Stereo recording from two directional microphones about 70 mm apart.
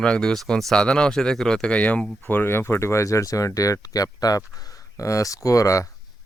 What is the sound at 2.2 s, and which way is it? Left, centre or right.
Speech, left.